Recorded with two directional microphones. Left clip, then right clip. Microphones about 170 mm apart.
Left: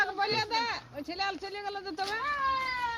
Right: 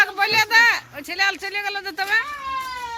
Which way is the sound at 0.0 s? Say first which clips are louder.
Right 11 dB; 20° right (ahead or behind).